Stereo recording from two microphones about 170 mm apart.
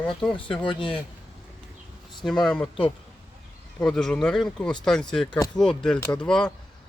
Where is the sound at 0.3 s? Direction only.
30° left (ahead or behind).